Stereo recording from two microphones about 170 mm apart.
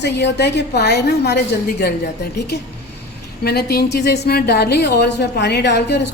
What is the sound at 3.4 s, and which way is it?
A woman's voice, 70° left (ahead or behind).